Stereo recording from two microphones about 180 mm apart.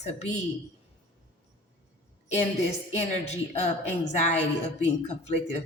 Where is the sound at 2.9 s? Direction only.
40° left (ahead or behind).